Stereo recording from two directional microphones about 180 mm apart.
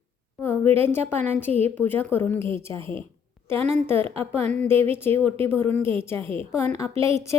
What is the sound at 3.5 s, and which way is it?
Speech, 10° left (ahead or behind).